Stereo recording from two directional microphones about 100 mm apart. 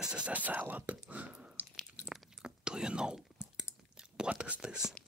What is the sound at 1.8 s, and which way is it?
Chewing, 5° right (ahead or behind).